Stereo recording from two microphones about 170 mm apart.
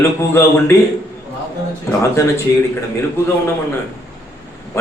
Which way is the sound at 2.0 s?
15° left (ahead or behind).